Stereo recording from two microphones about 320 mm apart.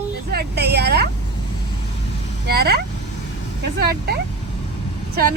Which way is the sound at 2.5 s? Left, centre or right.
Right.